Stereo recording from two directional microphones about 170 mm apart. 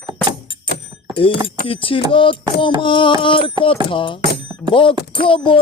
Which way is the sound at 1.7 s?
30° left (ahead or behind).